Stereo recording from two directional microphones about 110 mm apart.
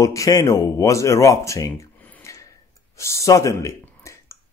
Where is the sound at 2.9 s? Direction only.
25° left (ahead or behind).